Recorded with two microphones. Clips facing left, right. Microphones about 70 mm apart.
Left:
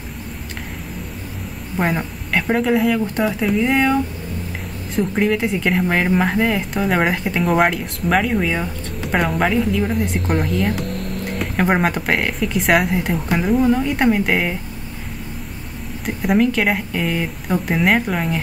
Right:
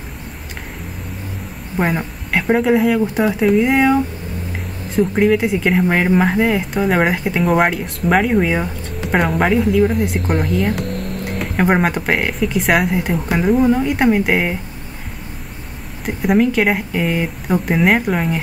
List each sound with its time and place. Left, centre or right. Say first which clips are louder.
1.8 s a woman's voice: right 2 dB; centre
9.0 s a woman's voice: right 2 dB; centre
16.1 s a woman's voice: right 2 dB; centre